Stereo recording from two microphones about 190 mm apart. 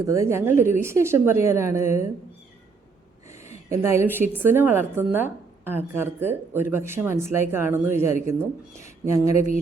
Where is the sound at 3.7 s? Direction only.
15° right (ahead or behind).